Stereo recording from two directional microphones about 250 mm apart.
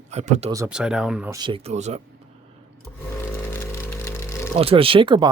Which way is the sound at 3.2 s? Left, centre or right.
Centre.